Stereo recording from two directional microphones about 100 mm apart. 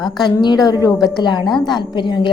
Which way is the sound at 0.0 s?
45° left (ahead or behind).